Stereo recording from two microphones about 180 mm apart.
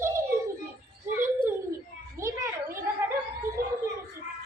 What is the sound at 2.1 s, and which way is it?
Children playing, 15° right (ahead or behind).